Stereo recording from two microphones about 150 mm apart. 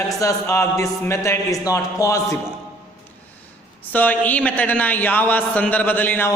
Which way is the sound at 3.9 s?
10° left (ahead or behind).